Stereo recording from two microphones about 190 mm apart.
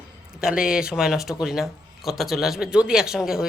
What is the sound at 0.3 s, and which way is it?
A man's voice, 5° right (ahead or behind).